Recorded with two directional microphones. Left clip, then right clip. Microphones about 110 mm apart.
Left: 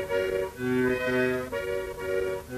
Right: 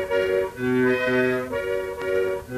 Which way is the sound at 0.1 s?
35° right (ahead or behind).